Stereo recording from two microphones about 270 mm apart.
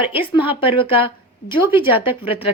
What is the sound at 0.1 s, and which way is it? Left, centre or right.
A woman's voice, centre.